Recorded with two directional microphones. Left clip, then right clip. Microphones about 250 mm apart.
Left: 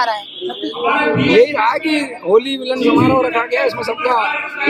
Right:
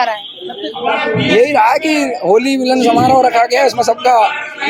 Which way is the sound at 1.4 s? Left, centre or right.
Right.